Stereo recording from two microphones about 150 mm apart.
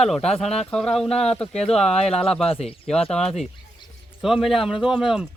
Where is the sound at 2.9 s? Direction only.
5° left (ahead or behind).